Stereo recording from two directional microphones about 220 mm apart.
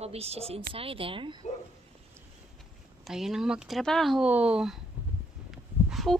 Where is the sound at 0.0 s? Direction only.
30° right (ahead or behind).